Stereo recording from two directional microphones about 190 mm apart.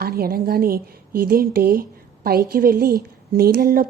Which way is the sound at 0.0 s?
50° right (ahead or behind).